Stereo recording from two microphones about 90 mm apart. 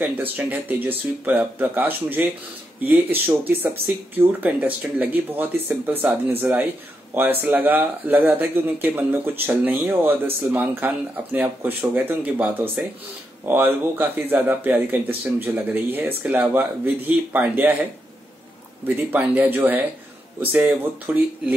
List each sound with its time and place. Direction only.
0.0 s speech: 15° right (ahead or behind)
18.9 s speech: 20° right (ahead or behind)